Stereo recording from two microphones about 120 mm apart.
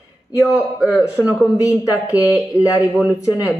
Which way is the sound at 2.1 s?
30° left (ahead or behind).